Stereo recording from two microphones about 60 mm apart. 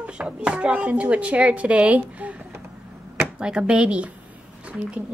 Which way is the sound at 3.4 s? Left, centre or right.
Centre.